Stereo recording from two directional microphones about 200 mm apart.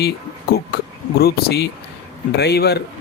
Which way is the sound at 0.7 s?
55° left (ahead or behind).